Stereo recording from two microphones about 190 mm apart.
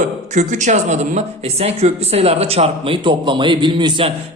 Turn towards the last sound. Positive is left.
turn(degrees=-25)  # may be behind; listen again after turning